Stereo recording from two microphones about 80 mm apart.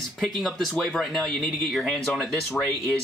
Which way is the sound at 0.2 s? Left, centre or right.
Centre.